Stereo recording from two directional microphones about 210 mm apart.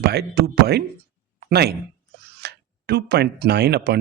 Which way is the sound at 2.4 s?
50° right (ahead or behind).